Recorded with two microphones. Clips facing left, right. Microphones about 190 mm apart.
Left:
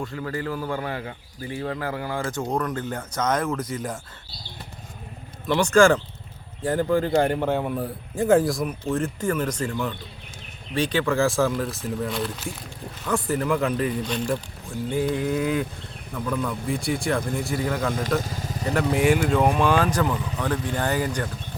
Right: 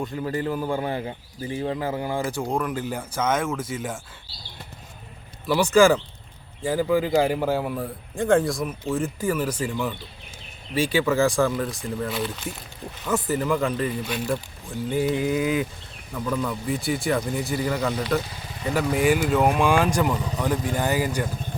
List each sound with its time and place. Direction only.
0.0 s a man's voice: 20° right (ahead or behind)
2.5 s a man's voice: 10° right (ahead or behind)
5.5 s a man's voice: 5° right (ahead or behind)
18.2 s vehicle: 45° left (ahead or behind)
18.6 s speech: centre (ahead or behind)